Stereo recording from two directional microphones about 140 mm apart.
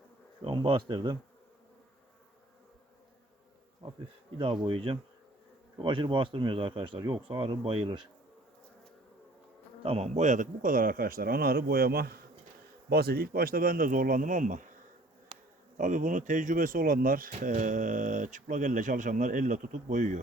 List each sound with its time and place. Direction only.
0.4 s speech: 35° right (ahead or behind)
4.4 s speech: 40° right (ahead or behind)
9.8 s a man's voice: 45° right (ahead or behind); by 14.7 s 70° right (ahead or behind)
15.3 s bee: 40° right (ahead or behind)
15.8 s speech: 65° right (ahead or behind); by 17.3 s 80° right
17.3 s speech: 65° right (ahead or behind)